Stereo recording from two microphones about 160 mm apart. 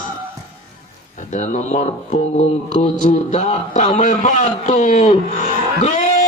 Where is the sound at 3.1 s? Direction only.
45° left (ahead or behind).